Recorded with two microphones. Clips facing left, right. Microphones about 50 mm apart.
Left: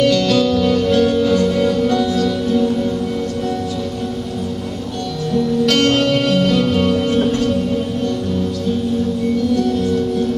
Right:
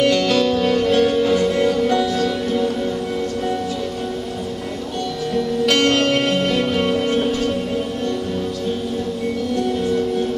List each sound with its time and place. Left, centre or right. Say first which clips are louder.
0.0 s music: left 2 dB; centre
5.7 s music: even; centre